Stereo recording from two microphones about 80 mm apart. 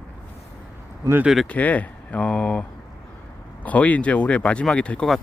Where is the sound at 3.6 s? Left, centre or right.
Centre.